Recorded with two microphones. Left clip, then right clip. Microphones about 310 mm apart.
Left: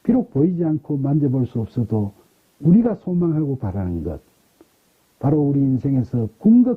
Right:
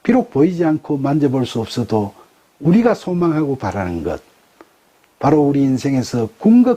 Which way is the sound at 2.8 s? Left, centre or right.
Centre.